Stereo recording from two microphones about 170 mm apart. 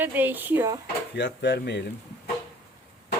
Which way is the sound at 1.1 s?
90° left.